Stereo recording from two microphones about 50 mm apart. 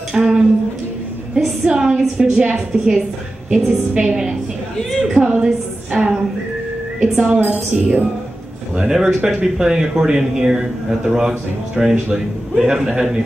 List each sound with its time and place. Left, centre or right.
0.1 s a sound: centre
1.3 s a woman's voice: centre
5.1 s a sound: centre
7.0 s speech: centre
7.4 s a woman's voice: right
8.7 s speech: centre